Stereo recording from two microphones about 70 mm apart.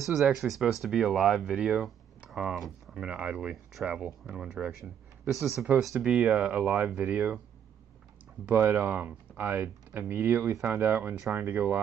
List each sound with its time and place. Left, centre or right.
0.0 s speech: centre
3.1 s speech: centre
6.2 s speech: centre
8.5 s speech: right